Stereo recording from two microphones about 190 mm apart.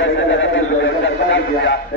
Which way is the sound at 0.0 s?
75° left (ahead or behind).